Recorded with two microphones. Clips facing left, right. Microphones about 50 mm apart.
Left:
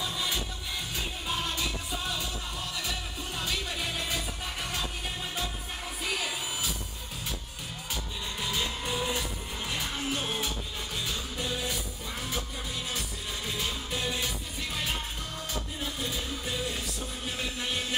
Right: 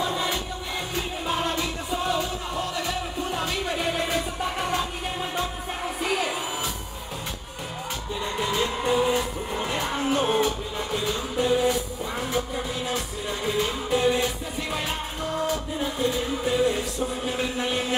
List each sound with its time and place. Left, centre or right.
0.0 s music: right
0.9 s music: centre
6.0 s music: centre
8.4 s music: centre
13.5 s music: centre